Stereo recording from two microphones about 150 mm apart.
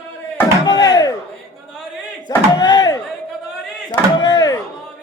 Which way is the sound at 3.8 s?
25° left (ahead or behind).